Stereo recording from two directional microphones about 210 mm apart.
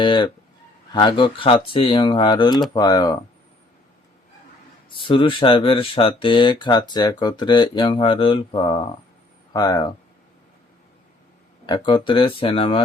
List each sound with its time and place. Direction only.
0.0 s speech: 25° left (ahead or behind)
4.9 s speech: 25° left (ahead or behind)
11.6 s speech: 25° left (ahead or behind)